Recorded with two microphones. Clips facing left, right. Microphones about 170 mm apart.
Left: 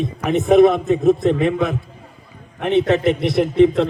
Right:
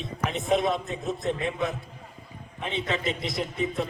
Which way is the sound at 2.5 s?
65° left (ahead or behind).